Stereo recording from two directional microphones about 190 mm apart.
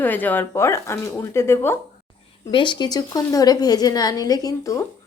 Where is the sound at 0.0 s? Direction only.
10° left (ahead or behind).